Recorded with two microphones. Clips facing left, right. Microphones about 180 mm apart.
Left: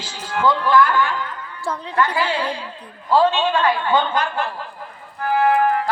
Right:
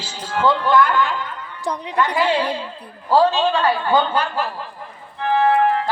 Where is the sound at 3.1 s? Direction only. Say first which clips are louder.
Right 1 dB; 35° right (ahead or behind).